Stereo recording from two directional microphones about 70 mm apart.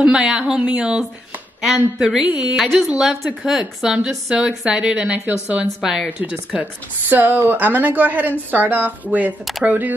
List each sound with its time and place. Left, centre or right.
0.0 s a woman's voice: centre
6.6 s speech: right